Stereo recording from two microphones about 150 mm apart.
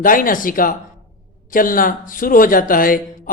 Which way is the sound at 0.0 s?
65° left (ahead or behind).